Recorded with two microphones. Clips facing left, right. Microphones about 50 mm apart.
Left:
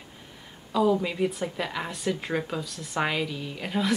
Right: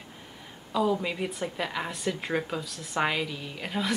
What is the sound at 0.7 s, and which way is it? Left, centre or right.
A woman's voice, centre.